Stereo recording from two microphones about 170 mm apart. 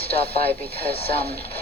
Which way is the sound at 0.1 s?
35° left (ahead or behind).